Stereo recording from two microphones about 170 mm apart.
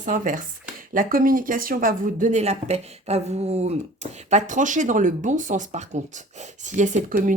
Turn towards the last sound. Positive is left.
turn(degrees=-50)  # may be behind; listen again after turning